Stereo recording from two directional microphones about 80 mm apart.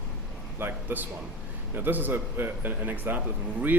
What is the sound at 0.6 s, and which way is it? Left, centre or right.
Speech, right.